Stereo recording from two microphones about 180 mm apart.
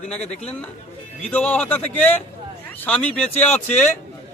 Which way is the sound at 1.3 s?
10° left (ahead or behind).